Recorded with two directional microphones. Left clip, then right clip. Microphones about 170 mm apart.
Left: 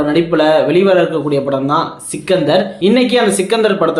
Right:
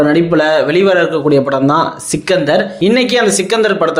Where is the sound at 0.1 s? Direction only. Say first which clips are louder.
Right 1 dB; 45° right (ahead or behind).